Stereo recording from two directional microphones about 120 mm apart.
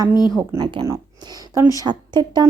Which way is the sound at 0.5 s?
50° right (ahead or behind).